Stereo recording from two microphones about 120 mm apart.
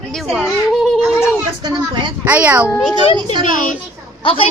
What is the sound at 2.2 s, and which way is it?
Speech, 15° right (ahead or behind).